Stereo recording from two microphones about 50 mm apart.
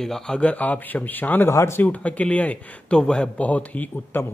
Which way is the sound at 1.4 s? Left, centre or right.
Left.